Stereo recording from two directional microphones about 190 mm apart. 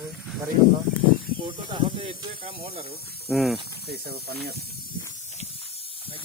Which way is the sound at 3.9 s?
55° right (ahead or behind).